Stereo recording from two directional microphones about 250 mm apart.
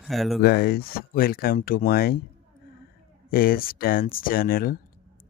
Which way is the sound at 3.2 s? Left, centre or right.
Left.